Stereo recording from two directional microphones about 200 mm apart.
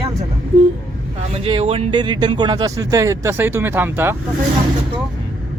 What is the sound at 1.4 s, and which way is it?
Speech, 30° right (ahead or behind).